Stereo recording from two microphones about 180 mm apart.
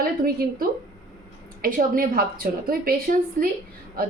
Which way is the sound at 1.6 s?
50° right (ahead or behind).